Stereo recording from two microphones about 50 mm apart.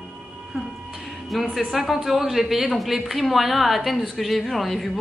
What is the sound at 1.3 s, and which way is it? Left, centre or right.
A woman's voice, centre.